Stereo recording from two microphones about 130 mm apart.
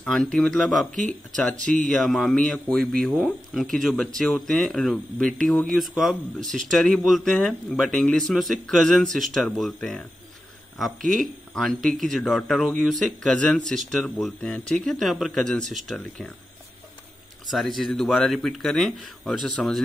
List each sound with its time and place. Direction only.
0.0 s a man's voice: 5° left (ahead or behind)
6.4 s speech: 75° right (ahead or behind)
6.7 s a man's voice: 5° left (ahead or behind)
17.5 s a man's voice: centre (ahead or behind)